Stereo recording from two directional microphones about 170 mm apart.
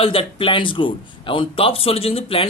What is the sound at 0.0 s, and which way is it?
A man's voice, 30° left (ahead or behind).